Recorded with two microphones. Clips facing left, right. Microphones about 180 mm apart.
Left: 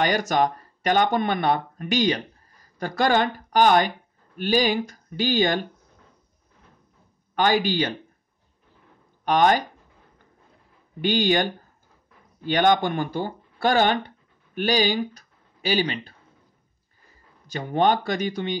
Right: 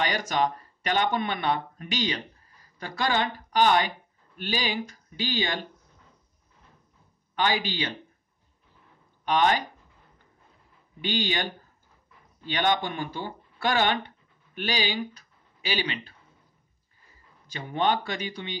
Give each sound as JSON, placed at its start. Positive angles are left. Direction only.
{"t": 0.0, "sound": "speech", "side_deg": 45}
{"t": 7.3, "sound": "speech", "side_deg": 45}
{"t": 9.2, "sound": "speech", "side_deg": 45}
{"t": 11.0, "sound": "speech", "side_deg": 45}
{"t": 12.4, "sound": "speech", "side_deg": 45}
{"t": 17.5, "sound": "speech", "side_deg": 45}